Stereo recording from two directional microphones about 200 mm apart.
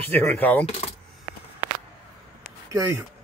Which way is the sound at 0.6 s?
30° left (ahead or behind).